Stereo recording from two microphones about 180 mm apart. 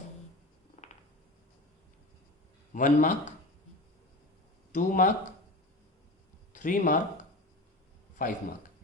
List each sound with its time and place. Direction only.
0.8 s a sound: 40° left (ahead or behind)
2.7 s a man's voice: 45° left (ahead or behind)
4.7 s speech: 45° left (ahead or behind)
6.5 s a man's voice: 45° left (ahead or behind)